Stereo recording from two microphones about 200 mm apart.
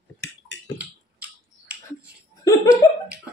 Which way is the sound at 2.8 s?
15° left (ahead or behind).